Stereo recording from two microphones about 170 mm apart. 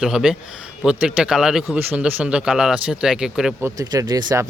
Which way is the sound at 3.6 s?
20° right (ahead or behind).